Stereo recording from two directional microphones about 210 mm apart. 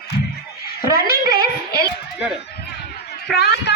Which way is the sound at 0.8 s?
45° left (ahead or behind).